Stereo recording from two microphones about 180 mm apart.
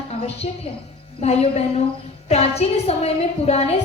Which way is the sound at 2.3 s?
35° left (ahead or behind).